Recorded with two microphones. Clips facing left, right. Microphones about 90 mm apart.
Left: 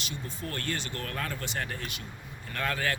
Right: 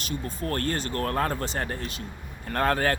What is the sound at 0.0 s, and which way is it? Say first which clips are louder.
Speech: right 6 dB; 40° right (ahead or behind).